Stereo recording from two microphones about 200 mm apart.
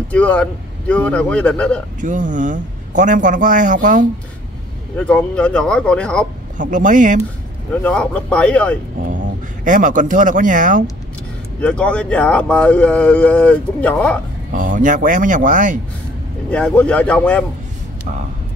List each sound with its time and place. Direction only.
0.1 s speech: 5° left (ahead or behind)
2.0 s a man's voice: 40° right (ahead or behind)
4.9 s speech: 5° left (ahead or behind)
6.6 s a man's voice: 40° right (ahead or behind)
7.8 s speech: 5° left (ahead or behind)
9.7 s a man's voice: 40° right (ahead or behind)
11.6 s speech: 5° left (ahead or behind)
14.5 s a man's voice: 40° right (ahead or behind)
16.4 s speech: 5° left (ahead or behind)